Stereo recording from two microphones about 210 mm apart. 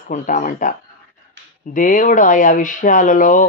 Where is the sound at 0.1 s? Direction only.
40° left (ahead or behind).